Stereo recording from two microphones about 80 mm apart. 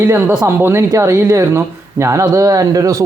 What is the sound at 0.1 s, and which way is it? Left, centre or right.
Speech, right.